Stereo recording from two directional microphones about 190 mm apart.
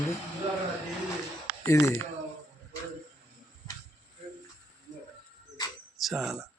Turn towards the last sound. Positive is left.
turn(degrees=0)  # may be behind; listen again after turning